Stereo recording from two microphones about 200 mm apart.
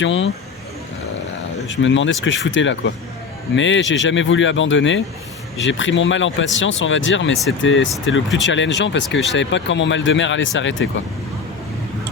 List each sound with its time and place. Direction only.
0.0 s speech: 70° left (ahead or behind)
1.6 s speech: 70° left (ahead or behind)